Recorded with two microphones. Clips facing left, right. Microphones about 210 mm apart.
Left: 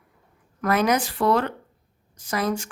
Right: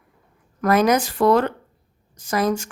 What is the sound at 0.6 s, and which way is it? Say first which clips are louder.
Speech: right 4 dB; 40° right (ahead or behind).